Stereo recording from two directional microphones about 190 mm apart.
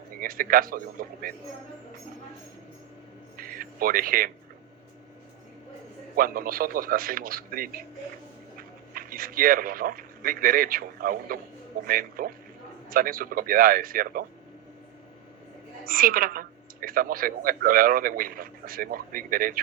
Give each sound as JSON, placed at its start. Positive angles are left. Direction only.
{"t": 0.2, "sound": "speech", "side_deg": -50}
{"t": 3.3, "sound": "a sound", "side_deg": -50}
{"t": 6.1, "sound": "speech", "side_deg": -50}
{"t": 8.9, "sound": "a man's voice", "side_deg": -50}
{"t": 15.9, "sound": "speech", "side_deg": -50}